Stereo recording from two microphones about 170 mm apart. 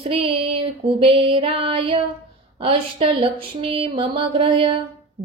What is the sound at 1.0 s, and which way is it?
Speech, 30° right (ahead or behind).